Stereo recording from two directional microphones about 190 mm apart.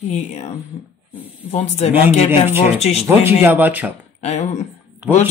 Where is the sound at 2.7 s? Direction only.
35° left (ahead or behind).